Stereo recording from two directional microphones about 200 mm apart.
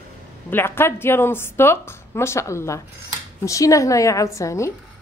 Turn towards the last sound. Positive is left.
turn(degrees=15)  # may be behind; listen again after turning